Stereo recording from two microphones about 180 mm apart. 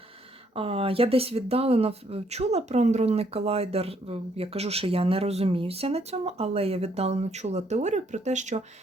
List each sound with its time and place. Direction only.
0.5 s speech: 30° right (ahead or behind)